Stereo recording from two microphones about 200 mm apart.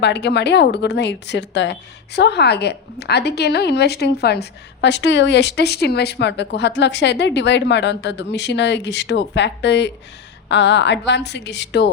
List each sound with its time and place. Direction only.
0.0 s a woman's voice: 60° left (ahead or behind)